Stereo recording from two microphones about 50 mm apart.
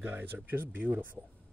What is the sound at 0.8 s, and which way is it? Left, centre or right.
Speech, right.